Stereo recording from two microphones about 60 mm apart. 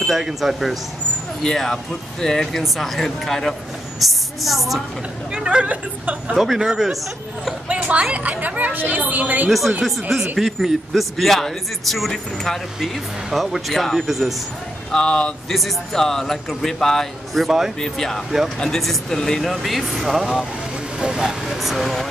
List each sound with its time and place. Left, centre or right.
0.0 s speech: centre
1.4 s speech: centre
4.0 s speech: centre
5.3 s speech: centre
6.3 s speech: centre
7.6 s speech: right
9.5 s speech: centre
10.1 s speech: centre
10.4 s speech: centre
14.9 s speech: centre
17.7 s speech: centre